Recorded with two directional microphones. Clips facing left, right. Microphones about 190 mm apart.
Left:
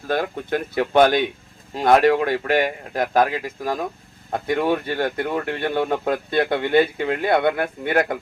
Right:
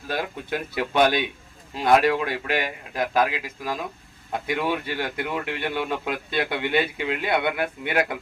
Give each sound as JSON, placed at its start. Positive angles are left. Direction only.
{"t": 0.1, "sound": "speech", "side_deg": 50}